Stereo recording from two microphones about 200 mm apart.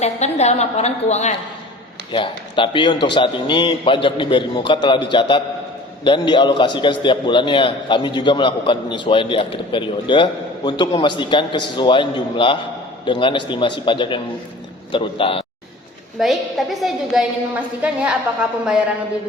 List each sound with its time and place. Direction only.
0.0 s a woman's voice: 35° left (ahead or behind)
2.1 s a man's voice: 25° left (ahead or behind)
16.1 s a woman's voice: centre (ahead or behind)